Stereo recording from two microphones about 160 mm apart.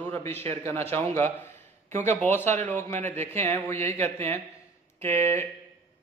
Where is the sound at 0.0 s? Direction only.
15° left (ahead or behind).